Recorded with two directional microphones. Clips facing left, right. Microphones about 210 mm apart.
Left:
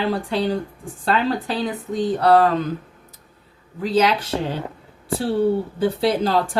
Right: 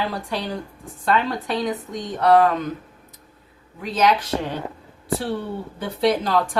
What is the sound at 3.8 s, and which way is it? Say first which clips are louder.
Speech: left 2 dB; 30° left (ahead or behind).